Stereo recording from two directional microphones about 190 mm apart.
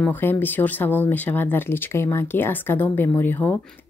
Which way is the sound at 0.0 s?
10° left (ahead or behind).